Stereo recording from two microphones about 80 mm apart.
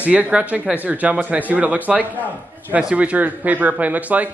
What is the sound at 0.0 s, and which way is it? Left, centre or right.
Speech, centre.